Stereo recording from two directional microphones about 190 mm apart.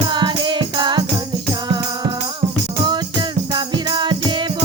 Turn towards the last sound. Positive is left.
turn(degrees=-25)  # may be behind; listen again after turning